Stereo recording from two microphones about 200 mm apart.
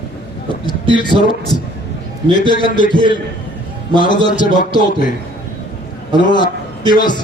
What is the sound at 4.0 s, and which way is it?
Speech, 20° left (ahead or behind).